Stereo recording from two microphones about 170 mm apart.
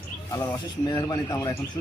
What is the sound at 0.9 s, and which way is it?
Speech, 20° left (ahead or behind).